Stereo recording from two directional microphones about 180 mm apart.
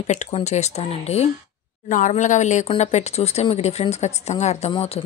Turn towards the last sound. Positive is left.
turn(degrees=30)  # may be behind; listen again after turning